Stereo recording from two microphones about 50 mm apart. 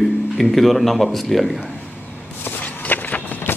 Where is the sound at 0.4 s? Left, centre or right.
Centre.